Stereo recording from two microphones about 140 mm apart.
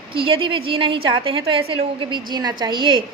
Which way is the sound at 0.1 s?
40° right (ahead or behind).